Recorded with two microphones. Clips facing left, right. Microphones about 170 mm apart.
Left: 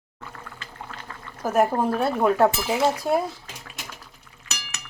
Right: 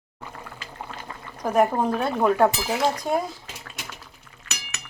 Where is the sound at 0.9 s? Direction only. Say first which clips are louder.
Right 2 dB; 15° right (ahead or behind).